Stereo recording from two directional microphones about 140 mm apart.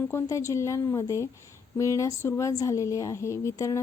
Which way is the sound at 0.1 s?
20° left (ahead or behind).